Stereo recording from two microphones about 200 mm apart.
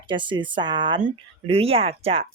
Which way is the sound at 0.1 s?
25° right (ahead or behind).